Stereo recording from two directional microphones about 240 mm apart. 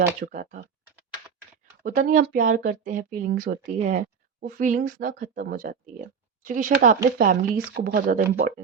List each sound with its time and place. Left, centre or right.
0.0 s speech: right
1.8 s speech: right